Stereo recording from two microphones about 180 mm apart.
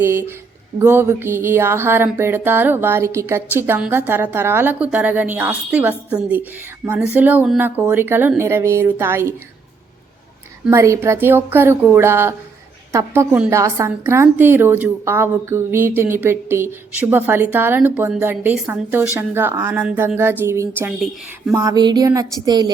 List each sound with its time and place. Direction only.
0.0 s a woman's voice: 15° right (ahead or behind)
10.7 s a woman's voice: 15° right (ahead or behind)